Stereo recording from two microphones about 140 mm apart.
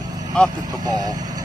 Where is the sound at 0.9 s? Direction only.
30° right (ahead or behind).